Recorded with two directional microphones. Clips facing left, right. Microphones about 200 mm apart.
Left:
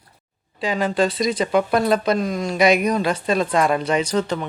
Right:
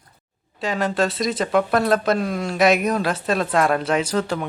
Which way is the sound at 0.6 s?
Centre (ahead or behind).